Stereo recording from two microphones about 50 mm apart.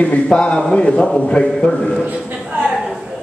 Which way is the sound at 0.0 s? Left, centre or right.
Left.